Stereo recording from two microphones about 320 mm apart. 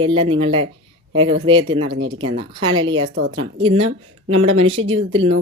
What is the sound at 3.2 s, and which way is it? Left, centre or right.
Speech, right.